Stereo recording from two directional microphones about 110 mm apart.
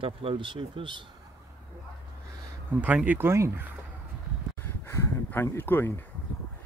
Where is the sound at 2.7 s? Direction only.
15° right (ahead or behind).